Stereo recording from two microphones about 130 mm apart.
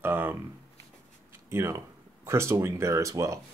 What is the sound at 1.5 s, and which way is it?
Speech, 20° right (ahead or behind).